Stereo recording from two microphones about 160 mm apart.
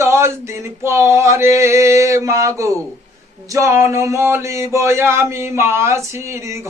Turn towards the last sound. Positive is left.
turn(degrees=-15)  # may be behind; listen again after turning